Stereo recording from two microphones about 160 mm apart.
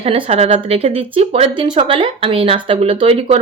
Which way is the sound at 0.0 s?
35° right (ahead or behind).